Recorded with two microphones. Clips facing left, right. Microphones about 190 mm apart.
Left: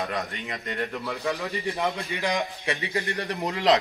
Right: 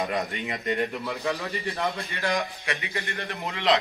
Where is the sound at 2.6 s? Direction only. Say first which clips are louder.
Left 4 dB; 30° left (ahead or behind).